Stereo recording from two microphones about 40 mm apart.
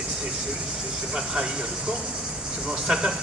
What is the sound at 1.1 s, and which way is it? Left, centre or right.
Speech, centre.